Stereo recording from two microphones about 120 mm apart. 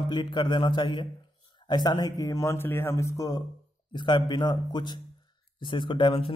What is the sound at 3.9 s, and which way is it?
Speech, 40° left (ahead or behind).